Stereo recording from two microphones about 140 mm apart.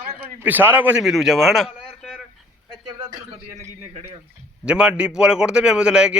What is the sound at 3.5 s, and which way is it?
Speech, 50° right (ahead or behind).